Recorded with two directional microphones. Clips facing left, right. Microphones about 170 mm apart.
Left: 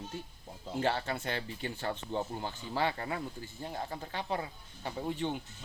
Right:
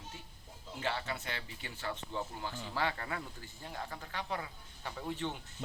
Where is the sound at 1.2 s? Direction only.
30° left (ahead or behind); by 5.4 s 15° left (ahead or behind).